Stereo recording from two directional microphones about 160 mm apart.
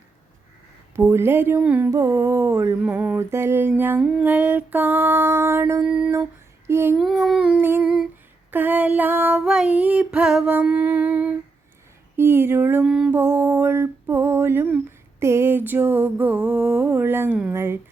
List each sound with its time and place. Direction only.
0.9 s female singing: 15° right (ahead or behind)
5.8 s humming: 5° right (ahead or behind)
6.7 s child singing: 15° right (ahead or behind)
6.9 s humming: centre (ahead or behind)
8.4 s female singing: 10° right (ahead or behind)